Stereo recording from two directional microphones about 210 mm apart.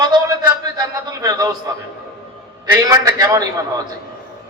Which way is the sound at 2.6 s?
15° right (ahead or behind).